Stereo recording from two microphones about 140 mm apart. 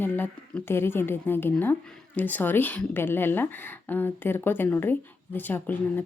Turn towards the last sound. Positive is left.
turn(degrees=15)  # may be behind; listen again after turning